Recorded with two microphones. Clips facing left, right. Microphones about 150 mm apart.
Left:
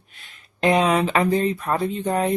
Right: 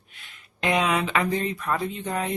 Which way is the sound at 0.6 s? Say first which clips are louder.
Left 5 dB; 35° left (ahead or behind).